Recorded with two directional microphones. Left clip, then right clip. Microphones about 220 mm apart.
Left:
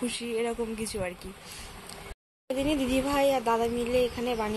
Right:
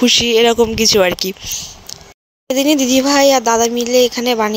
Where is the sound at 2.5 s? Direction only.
40° right (ahead or behind).